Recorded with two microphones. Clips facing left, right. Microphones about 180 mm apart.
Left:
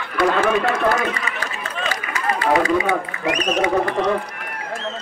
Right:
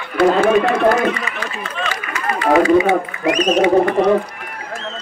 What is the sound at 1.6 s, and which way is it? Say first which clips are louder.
Chatter: right 2 dB; 40° left (ahead or behind).